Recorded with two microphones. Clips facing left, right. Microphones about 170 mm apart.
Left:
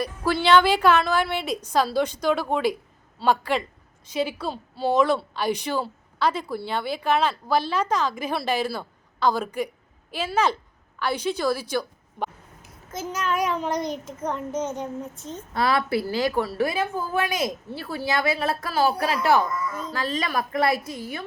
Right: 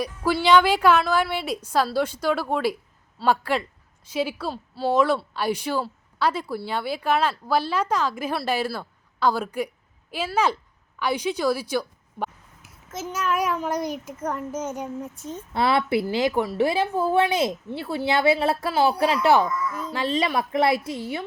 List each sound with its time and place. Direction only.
0.0 s a child's voice: 10° right (ahead or behind)
11.0 s a sound: 15° right (ahead or behind)
13.1 s a child's voice: 5° right (ahead or behind)
15.5 s a woman's voice: 25° right (ahead or behind)